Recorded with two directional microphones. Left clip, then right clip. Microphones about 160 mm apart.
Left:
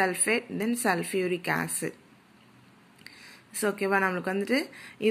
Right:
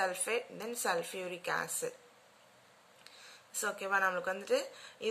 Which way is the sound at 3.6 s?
25° left (ahead or behind).